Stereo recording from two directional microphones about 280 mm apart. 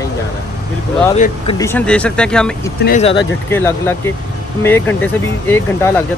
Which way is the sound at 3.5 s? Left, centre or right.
Centre.